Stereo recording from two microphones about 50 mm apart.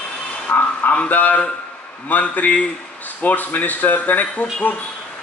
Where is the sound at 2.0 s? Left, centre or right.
Left.